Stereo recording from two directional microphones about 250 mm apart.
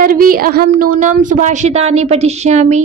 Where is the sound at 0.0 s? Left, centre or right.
Right.